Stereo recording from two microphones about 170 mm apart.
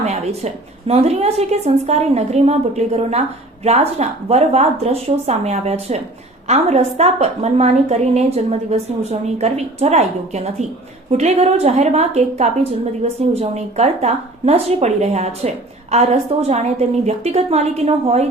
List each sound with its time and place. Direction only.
0.0 s a woman's voice: 40° right (ahead or behind)